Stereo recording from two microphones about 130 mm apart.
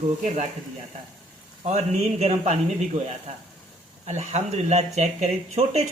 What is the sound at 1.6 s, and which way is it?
A man's voice, 60° right (ahead or behind).